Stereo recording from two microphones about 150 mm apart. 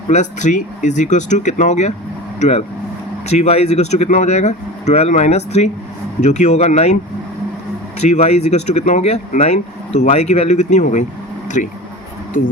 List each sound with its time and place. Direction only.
0.1 s speech: 50° left (ahead or behind)
8.0 s speech: 45° left (ahead or behind)
11.4 s a sound: 55° left (ahead or behind)